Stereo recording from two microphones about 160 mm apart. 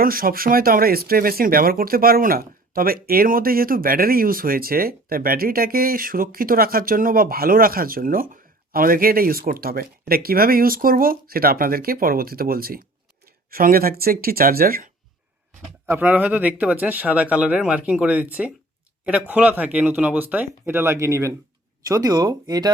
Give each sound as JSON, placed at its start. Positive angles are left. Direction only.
{"t": 0.0, "sound": "speech", "side_deg": -65}
{"t": 15.9, "sound": "speech", "side_deg": -10}